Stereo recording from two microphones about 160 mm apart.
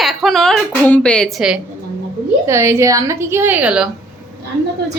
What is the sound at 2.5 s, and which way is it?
A woman's voice, 15° right (ahead or behind).